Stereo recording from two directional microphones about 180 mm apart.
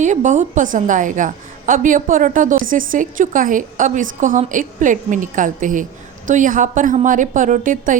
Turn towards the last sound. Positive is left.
turn(degrees=-45)  # may be behind; listen again after turning